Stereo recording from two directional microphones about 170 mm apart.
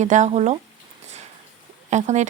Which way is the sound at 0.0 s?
45° right (ahead or behind).